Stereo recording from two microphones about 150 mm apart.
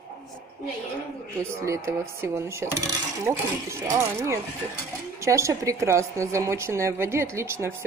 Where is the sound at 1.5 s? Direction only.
20° right (ahead or behind).